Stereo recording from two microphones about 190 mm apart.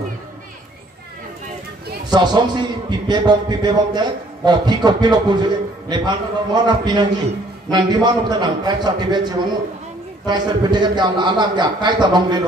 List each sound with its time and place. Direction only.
2.1 s a man's voice: 25° right (ahead or behind)